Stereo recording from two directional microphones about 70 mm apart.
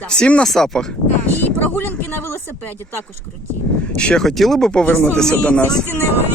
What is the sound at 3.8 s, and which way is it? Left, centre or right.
Speech, centre.